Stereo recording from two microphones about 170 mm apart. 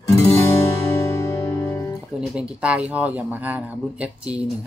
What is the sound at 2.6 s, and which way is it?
Speech, 10° right (ahead or behind).